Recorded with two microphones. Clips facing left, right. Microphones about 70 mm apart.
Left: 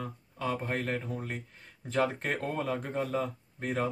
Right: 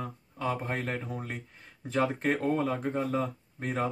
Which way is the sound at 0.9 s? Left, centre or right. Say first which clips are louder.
Left 1 dB; right.